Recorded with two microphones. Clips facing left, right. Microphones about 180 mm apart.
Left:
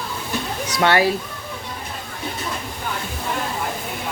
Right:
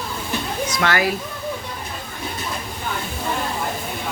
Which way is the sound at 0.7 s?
30° left (ahead or behind).